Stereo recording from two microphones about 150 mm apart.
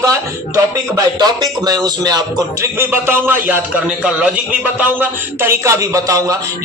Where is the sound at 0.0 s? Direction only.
20° right (ahead or behind).